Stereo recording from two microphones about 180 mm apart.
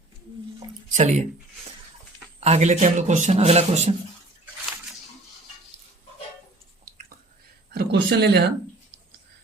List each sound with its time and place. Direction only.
0.9 s speech: 40° right (ahead or behind)
2.4 s speech: 35° right (ahead or behind)
7.7 s speech: 65° right (ahead or behind)